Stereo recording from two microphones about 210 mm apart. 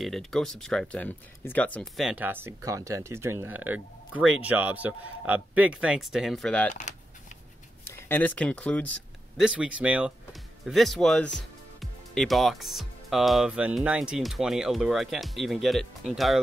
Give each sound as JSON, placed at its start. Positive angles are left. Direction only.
{"t": 0.0, "sound": "speech", "side_deg": 0}
{"t": 6.7, "sound": "speech", "side_deg": 35}
{"t": 8.1, "sound": "speech", "side_deg": 10}